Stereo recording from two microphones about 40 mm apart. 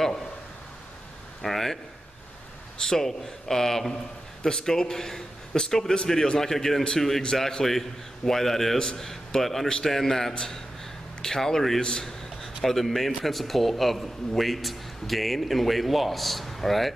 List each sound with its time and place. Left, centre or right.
1.4 s a man's voice: centre
2.8 s a man's voice: centre